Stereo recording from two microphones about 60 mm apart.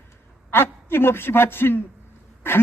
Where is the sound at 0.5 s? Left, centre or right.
Left.